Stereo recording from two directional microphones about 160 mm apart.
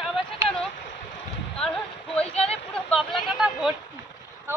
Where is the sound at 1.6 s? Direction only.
5° left (ahead or behind).